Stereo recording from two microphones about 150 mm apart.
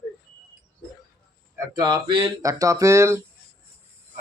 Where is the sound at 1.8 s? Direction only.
30° right (ahead or behind).